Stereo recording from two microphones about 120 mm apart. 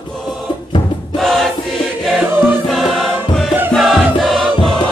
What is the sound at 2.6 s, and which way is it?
Music, centre (ahead or behind).